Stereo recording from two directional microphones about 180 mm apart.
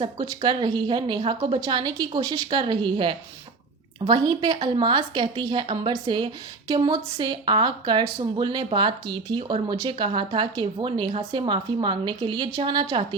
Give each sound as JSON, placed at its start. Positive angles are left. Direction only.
{"t": 0.0, "sound": "speech", "side_deg": -25}